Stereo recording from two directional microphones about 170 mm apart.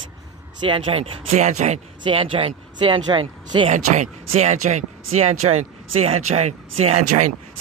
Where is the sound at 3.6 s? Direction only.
40° right (ahead or behind).